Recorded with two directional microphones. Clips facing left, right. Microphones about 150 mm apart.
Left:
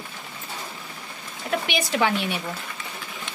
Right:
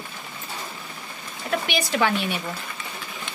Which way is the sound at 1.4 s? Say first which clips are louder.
Even; 20° left (ahead or behind).